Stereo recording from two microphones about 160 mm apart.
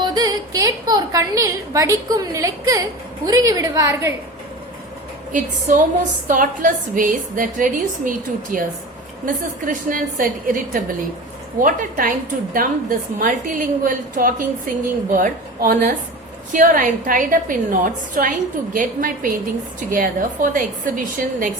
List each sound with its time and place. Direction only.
0.0 s a woman's voice: 25° right (ahead or behind)
5.3 s a woman's voice: 55° right (ahead or behind)